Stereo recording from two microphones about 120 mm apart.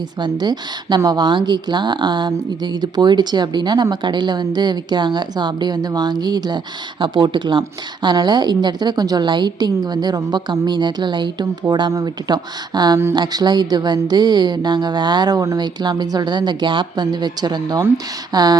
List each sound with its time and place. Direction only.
0.2 s a woman's voice: 35° right (ahead or behind)